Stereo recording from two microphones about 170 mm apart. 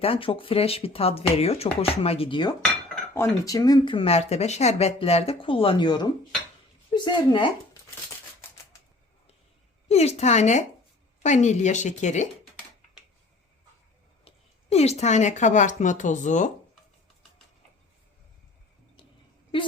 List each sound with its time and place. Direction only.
0.0 s speech: 35° left (ahead or behind)
9.9 s speech: 40° left (ahead or behind)
14.3 s speech: 40° left (ahead or behind)